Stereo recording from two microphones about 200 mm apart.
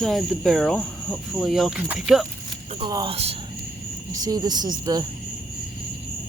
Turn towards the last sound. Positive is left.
turn(degrees=-20)  # may be behind; listen again after turning